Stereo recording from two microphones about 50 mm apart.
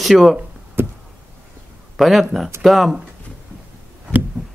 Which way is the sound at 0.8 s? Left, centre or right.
Right.